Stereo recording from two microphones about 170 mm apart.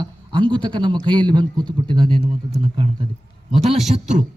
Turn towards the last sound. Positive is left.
turn(degrees=-40)  # may be behind; listen again after turning